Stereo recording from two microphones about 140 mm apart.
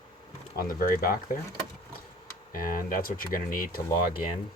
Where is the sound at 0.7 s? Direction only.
90° left.